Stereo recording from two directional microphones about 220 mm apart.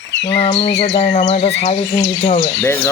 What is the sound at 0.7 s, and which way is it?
Bird, 55° left (ahead or behind).